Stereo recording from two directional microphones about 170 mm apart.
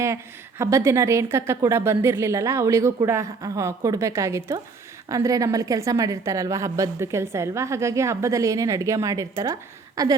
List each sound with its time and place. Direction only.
0.6 s a woman's voice: 15° right (ahead or behind)